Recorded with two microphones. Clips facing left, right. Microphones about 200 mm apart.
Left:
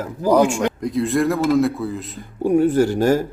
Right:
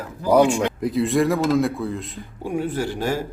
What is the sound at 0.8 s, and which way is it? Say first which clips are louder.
Speech: even; centre (ahead or behind).